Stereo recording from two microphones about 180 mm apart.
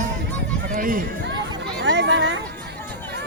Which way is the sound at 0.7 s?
50° right (ahead or behind).